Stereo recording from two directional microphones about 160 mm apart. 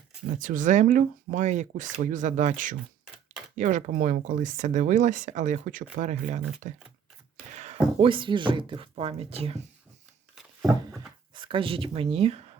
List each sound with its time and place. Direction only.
0.3 s speech: 55° right (ahead or behind)
7.5 s a sound: 45° right (ahead or behind)
7.9 s speech: 35° right (ahead or behind)
11.3 s speech: 30° right (ahead or behind)